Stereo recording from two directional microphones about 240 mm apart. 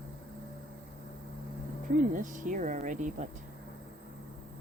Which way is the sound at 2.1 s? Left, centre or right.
Right.